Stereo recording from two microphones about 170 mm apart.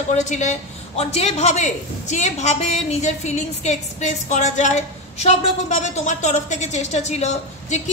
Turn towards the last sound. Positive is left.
turn(degrees=40)  # may be behind; listen again after turning